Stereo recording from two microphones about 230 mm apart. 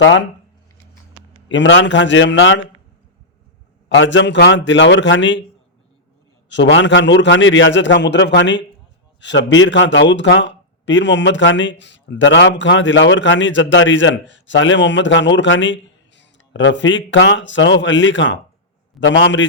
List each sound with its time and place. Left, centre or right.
0.0 s a man's voice: left
1.5 s a man's voice: left
3.8 s speech: left
6.5 s speech: left